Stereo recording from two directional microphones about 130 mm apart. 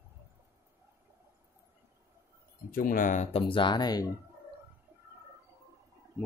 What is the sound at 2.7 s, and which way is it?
Speech, 90° left.